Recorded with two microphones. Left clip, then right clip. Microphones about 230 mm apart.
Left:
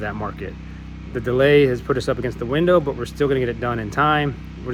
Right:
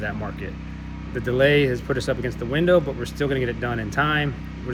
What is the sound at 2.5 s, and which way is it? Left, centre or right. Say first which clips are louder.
Speech: left 2 dB; left.